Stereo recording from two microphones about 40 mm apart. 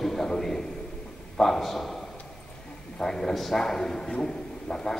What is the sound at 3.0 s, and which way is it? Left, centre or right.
A man's voice, centre.